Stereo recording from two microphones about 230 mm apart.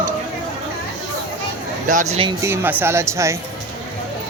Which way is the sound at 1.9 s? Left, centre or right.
Right.